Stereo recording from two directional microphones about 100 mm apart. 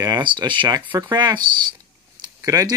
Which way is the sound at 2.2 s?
35° right (ahead or behind).